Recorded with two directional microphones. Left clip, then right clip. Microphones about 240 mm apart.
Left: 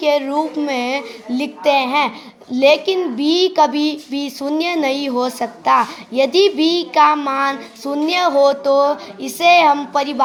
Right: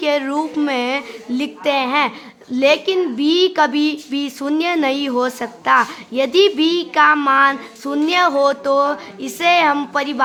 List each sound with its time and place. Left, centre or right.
0.0 s a child's voice: centre